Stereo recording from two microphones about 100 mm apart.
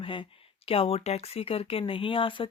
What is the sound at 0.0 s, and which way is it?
Speech, 60° left (ahead or behind).